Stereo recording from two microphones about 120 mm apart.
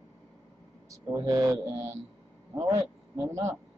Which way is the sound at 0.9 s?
30° right (ahead or behind).